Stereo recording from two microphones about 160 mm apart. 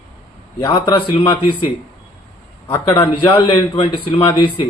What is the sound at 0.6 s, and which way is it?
Speech, 25° left (ahead or behind).